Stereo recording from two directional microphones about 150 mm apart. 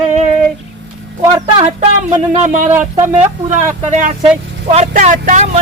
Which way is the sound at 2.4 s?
50° right (ahead or behind).